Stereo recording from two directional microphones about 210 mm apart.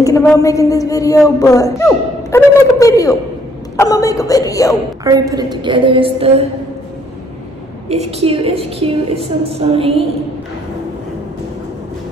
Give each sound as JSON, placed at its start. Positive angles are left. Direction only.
{"t": 0.0, "sound": "a sound", "side_deg": 15}
{"t": 0.4, "sound": "a man's voice", "side_deg": 15}
{"t": 5.0, "sound": "a woman's voice", "side_deg": -15}
{"t": 7.9, "sound": "a woman's voice", "side_deg": -30}